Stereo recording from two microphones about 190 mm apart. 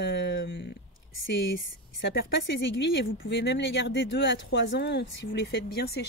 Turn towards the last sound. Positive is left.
turn(degrees=60)  # may be behind; listen again after turning